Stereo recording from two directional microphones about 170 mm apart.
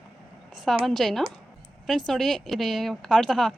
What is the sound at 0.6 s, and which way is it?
A woman's voice, centre (ahead or behind).